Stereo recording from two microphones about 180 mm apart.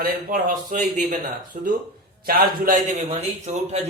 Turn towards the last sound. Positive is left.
turn(degrees=-40)  # may be behind; listen again after turning